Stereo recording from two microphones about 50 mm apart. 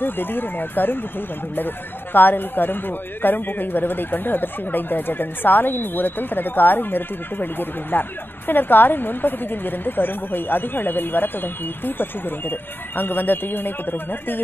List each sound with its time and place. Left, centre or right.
0.0 s a man's voice: left
2.1 s a man's voice: left